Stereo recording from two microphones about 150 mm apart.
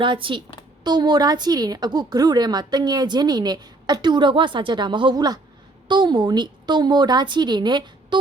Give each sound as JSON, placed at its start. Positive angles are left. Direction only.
{"t": 0.0, "sound": "a woman's voice", "side_deg": -35}